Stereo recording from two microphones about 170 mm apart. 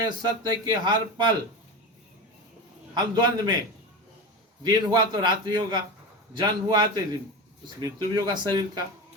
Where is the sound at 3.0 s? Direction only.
25° right (ahead or behind).